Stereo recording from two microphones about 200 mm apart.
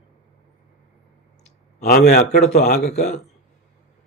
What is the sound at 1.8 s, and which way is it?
A man's voice, 45° left (ahead or behind).